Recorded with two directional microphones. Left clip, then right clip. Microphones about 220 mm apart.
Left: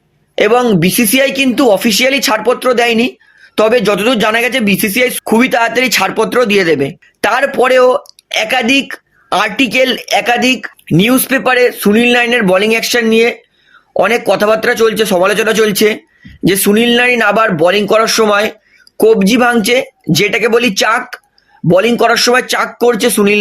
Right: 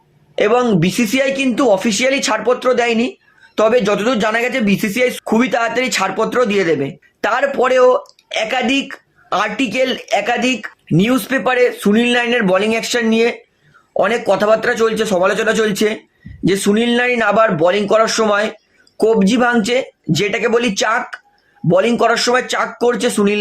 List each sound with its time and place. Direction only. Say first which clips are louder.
0.3 s speech: left 4 dB; 40° left (ahead or behind)